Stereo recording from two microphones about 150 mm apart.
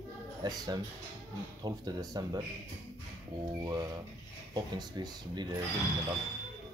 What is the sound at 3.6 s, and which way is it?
Speech, 25° right (ahead or behind).